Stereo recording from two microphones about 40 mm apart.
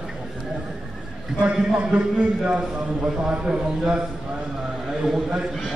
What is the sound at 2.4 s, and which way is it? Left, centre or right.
A man's voice, right.